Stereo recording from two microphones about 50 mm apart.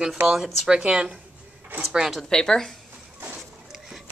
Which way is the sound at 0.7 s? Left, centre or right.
Centre.